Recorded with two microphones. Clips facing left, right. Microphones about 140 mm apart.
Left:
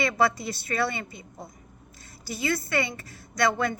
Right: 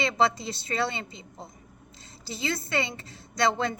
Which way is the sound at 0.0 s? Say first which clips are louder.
Left 1 dB; 25° right (ahead or behind).